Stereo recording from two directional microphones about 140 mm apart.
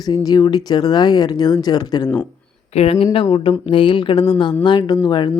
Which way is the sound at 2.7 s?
45° left (ahead or behind).